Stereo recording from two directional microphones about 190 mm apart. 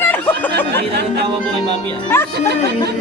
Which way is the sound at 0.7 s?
60° right (ahead or behind).